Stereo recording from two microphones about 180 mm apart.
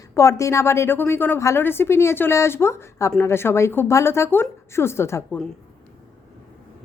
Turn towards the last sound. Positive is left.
turn(degrees=15)  # may be behind; listen again after turning